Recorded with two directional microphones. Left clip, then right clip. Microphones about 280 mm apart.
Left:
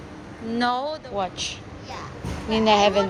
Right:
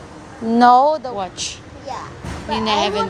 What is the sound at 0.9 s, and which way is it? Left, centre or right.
Speech, centre.